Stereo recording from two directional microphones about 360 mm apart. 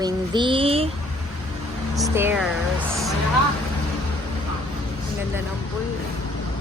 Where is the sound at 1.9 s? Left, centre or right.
Centre.